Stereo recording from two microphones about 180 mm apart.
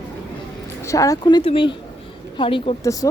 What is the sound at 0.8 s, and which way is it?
A woman's voice, 15° left (ahead or behind).